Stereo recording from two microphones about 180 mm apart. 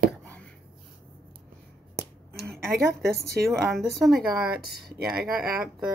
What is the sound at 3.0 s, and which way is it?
Speech, 60° right (ahead or behind).